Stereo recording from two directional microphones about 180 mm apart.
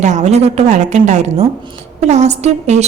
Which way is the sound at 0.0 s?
40° right (ahead or behind).